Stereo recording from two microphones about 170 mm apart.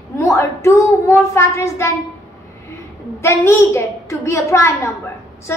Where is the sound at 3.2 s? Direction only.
15° left (ahead or behind).